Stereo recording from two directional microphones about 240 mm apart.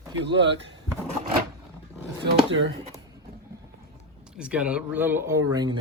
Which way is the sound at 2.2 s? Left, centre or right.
Right.